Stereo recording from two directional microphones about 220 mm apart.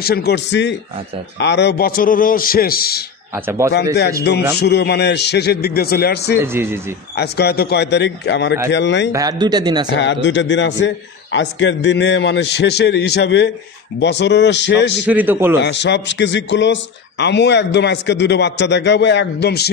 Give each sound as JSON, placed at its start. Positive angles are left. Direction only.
{"t": 0.0, "sound": "a man's voice", "side_deg": 45}
{"t": 3.3, "sound": "a man's voice", "side_deg": -10}
{"t": 4.6, "sound": "a man's voice", "side_deg": 50}
{"t": 6.4, "sound": "a man's voice", "side_deg": -10}
{"t": 7.2, "sound": "a man's voice", "side_deg": 45}
{"t": 9.1, "sound": "speech", "side_deg": -15}
{"t": 9.9, "sound": "a man's voice", "side_deg": 55}
{"t": 15.0, "sound": "a man's voice", "side_deg": -10}
{"t": 15.6, "sound": "a man's voice", "side_deg": 55}